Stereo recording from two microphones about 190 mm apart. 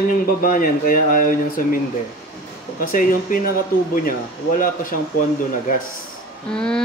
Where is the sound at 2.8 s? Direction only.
45° left (ahead or behind).